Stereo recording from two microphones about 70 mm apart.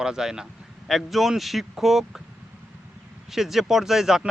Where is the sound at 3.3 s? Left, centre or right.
Centre.